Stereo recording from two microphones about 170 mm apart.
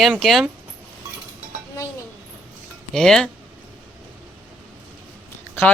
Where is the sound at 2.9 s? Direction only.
5° left (ahead or behind).